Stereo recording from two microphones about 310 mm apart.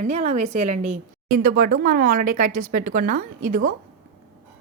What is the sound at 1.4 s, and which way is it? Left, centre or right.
A woman's voice, right.